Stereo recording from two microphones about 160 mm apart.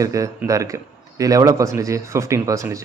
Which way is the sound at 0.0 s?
20° right (ahead or behind).